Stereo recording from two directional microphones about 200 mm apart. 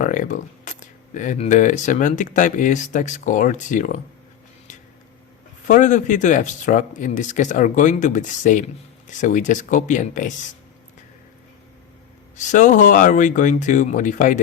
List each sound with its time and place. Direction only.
0.0 s speech: 40° left (ahead or behind)
5.6 s speech: 40° left (ahead or behind)
12.4 s speech: 40° left (ahead or behind)